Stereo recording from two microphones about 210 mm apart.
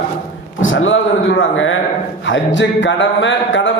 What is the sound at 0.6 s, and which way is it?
Speech, 65° left (ahead or behind).